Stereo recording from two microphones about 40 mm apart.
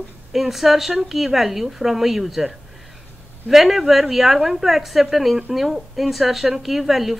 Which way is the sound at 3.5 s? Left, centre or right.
Centre.